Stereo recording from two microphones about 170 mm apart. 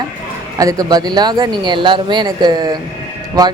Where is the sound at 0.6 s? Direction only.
20° right (ahead or behind).